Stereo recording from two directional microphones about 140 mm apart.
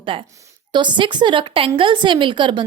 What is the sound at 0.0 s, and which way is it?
A woman's voice, 40° right (ahead or behind).